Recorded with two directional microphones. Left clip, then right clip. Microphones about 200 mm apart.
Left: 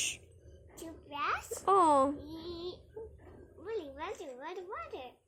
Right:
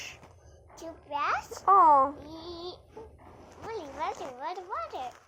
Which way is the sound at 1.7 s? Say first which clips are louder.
Right 7 dB; 50° left (ahead or behind).